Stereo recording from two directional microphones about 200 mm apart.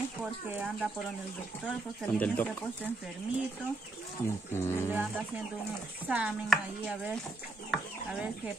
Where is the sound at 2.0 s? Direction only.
5° left (ahead or behind).